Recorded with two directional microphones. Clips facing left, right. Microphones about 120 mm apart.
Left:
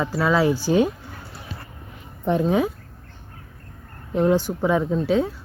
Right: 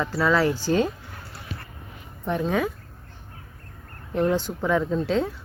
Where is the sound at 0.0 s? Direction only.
15° left (ahead or behind).